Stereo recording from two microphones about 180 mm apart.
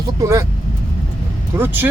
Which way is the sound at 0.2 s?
15° right (ahead or behind).